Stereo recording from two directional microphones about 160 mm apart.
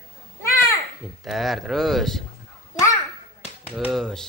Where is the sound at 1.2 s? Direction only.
Centre (ahead or behind).